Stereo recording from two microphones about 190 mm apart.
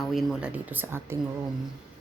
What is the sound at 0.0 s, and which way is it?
Speech, centre (ahead or behind).